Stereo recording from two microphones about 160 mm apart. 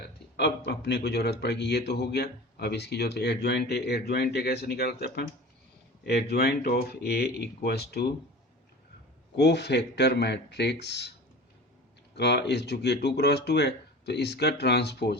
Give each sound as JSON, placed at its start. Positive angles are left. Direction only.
{"t": 0.0, "sound": "speech", "side_deg": 90}
{"t": 9.3, "sound": "speech", "side_deg": 90}
{"t": 12.1, "sound": "speech", "side_deg": 90}